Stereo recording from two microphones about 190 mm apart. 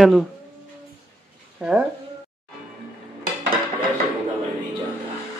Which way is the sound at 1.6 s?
10° right (ahead or behind).